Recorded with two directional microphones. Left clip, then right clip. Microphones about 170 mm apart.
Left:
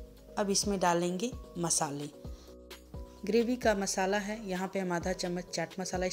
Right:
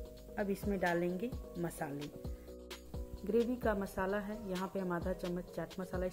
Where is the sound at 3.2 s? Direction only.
25° left (ahead or behind).